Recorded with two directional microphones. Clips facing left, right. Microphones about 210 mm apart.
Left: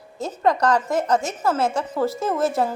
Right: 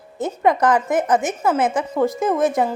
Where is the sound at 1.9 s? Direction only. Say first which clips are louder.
Right 4 dB; 15° right (ahead or behind).